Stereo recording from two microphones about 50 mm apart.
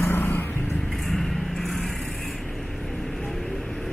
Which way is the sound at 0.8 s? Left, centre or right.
Centre.